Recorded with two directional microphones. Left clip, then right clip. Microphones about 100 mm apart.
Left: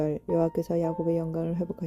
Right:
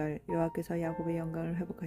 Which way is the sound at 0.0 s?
20° left (ahead or behind).